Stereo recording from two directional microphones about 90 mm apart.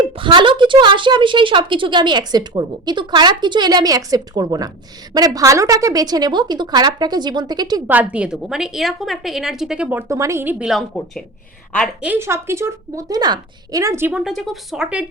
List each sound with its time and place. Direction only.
0.0 s a woman's voice: 65° right (ahead or behind); by 7.8 s 50° right (ahead or behind)
7.9 s a woman's voice: 15° right (ahead or behind)
10.1 s a woman's voice: 35° right (ahead or behind)
10.6 s speech: 5° right (ahead or behind)
12.0 s speech: 25° right (ahead or behind)
13.1 s a woman's voice: 50° right (ahead or behind)
13.8 s speech: 30° right (ahead or behind)
14.1 s speech: 5° right (ahead or behind)